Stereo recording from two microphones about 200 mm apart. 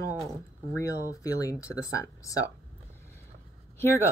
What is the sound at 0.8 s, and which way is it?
A woman's voice, 15° left (ahead or behind).